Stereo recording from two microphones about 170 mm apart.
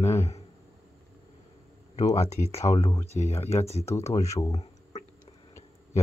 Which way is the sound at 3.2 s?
40° left (ahead or behind).